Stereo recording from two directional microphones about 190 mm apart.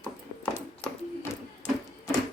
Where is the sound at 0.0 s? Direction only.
5° left (ahead or behind).